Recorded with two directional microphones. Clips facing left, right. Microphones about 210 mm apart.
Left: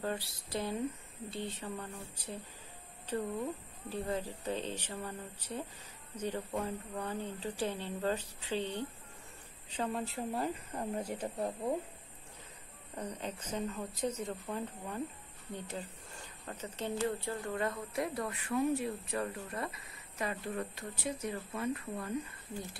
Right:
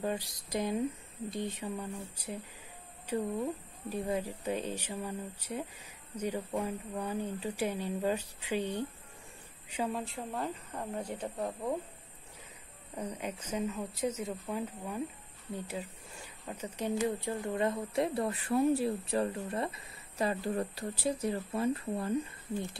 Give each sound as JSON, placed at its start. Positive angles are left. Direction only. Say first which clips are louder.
{"t": 0.0, "sound": "speech", "louder": "right 3 dB", "side_deg": -15}
{"t": 12.9, "sound": "speech", "louder": "right 2 dB", "side_deg": -10}